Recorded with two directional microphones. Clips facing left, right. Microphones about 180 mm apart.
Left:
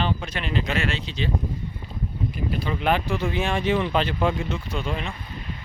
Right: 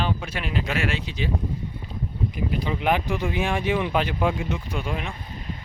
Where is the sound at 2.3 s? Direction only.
15° right (ahead or behind).